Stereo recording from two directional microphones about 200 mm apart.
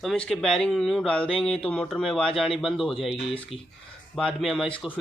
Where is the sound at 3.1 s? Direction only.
30° left (ahead or behind).